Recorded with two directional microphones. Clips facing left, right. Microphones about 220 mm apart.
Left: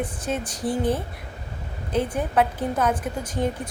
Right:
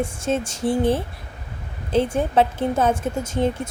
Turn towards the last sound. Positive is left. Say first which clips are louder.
# right 4 dB
turn(degrees=-25)  # may be behind; listen again after turning